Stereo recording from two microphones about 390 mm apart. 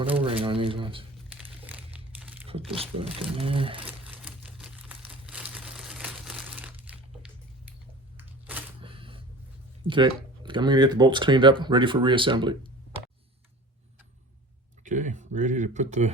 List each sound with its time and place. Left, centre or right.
0.0 s crumpling: centre
2.6 s speech: centre
4.0 s crumpling: centre
8.1 s camera: centre
9.8 s speech: centre
14.8 s speech: centre